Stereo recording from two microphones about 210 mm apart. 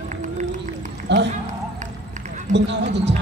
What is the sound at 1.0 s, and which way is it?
Speech, 55° right (ahead or behind).